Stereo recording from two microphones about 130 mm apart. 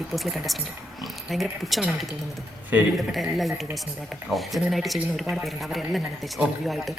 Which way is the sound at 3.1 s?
Centre (ahead or behind).